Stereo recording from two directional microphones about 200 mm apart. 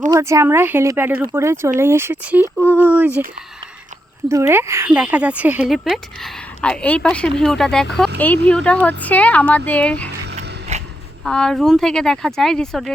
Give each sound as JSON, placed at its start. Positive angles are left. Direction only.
{"t": 0.1, "sound": "speech", "side_deg": -15}
{"t": 4.3, "sound": "speech", "side_deg": -15}
{"t": 10.7, "sound": "a sound", "side_deg": -35}
{"t": 11.2, "sound": "speech", "side_deg": 5}